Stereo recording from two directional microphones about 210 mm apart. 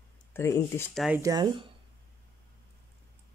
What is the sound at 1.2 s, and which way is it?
Speech, 20° right (ahead or behind).